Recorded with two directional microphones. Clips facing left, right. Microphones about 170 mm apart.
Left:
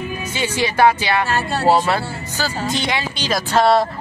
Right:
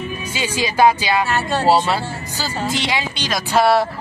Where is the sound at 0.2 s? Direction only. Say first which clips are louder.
Left 2 dB; 10° right (ahead or behind).